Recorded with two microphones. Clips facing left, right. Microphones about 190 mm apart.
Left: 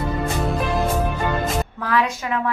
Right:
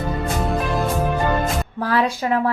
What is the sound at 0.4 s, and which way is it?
Music, centre (ahead or behind).